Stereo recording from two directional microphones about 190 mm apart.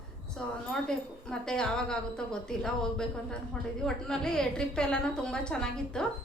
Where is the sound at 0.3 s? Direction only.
5° left (ahead or behind).